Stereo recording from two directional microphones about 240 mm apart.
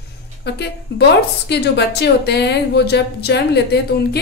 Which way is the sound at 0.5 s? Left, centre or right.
Left.